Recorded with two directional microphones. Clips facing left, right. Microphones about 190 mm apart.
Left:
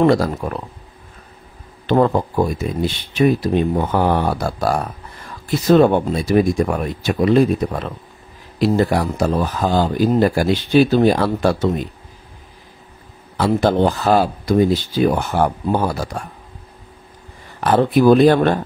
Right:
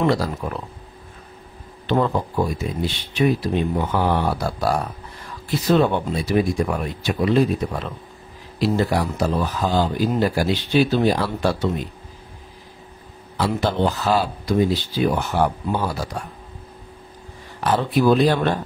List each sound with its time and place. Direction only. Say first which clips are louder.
0.0 s speech: left 6 dB; 50° left (ahead or behind)
1.9 s speech: left 5 dB; 50° left (ahead or behind)
13.4 s speech: left 5 dB; 50° left (ahead or behind)
17.6 s speech: left 5 dB; 55° left (ahead or behind)